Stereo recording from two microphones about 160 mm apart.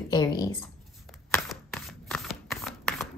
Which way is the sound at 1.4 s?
Centre (ahead or behind).